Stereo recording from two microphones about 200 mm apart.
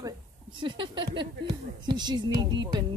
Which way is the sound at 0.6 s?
25° right (ahead or behind).